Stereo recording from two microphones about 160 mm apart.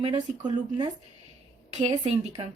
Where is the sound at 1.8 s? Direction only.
40° right (ahead or behind).